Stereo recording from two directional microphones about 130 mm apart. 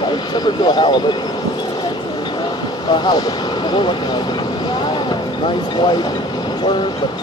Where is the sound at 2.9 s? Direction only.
35° left (ahead or behind).